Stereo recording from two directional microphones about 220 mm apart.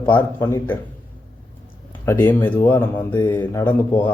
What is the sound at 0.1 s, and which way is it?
Speech, 10° left (ahead or behind).